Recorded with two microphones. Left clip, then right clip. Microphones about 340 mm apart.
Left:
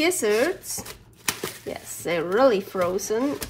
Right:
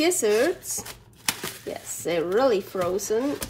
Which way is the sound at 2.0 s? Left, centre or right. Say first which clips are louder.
Left 2 dB; centre.